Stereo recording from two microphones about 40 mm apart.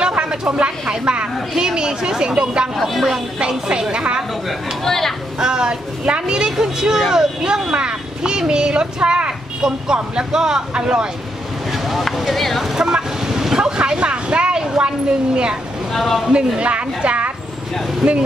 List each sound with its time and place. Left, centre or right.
0.2 s speech: right
1.5 s speech: centre
2.9 s speech: centre
3.3 s speech: right
4.8 s speech: centre
5.4 s speech: centre
7.7 s speech: right
12.0 s speech: centre
12.7 s speech: centre
15.9 s speech: centre
16.3 s speech: right
18.0 s speech: centre